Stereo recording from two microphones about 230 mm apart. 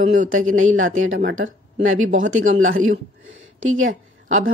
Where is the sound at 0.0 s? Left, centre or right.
Right.